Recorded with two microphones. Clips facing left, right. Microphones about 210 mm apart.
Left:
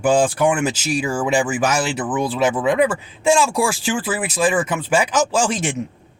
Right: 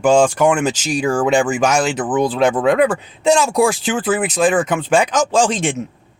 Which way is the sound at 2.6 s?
65° right (ahead or behind).